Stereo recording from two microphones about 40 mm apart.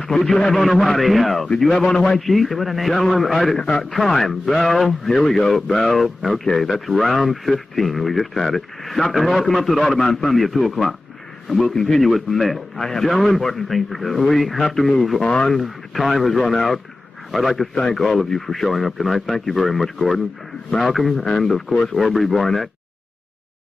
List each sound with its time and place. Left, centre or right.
0.0 s a man's voice: centre
3.5 s a man's voice: centre
3.9 s a man's voice: centre
11.7 s a man's voice: centre
12.8 s a man's voice: centre
22.0 s speech: centre